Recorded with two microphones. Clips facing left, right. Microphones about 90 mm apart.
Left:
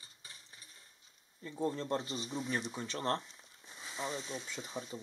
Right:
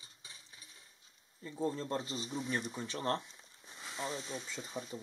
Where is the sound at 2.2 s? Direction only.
5° left (ahead or behind).